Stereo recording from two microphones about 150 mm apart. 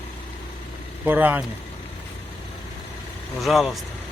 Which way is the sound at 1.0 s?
10° right (ahead or behind).